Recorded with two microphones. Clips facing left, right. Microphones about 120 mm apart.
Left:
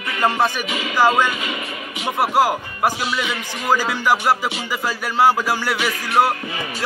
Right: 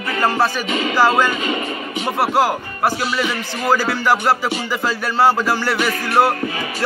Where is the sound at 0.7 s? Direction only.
35° right (ahead or behind).